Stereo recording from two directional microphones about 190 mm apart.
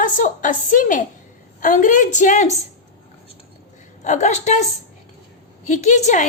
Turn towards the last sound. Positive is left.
turn(degrees=40)  # may be behind; listen again after turning